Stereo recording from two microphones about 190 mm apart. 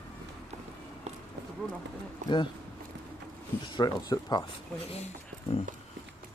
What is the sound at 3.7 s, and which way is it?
Speech, 20° left (ahead or behind).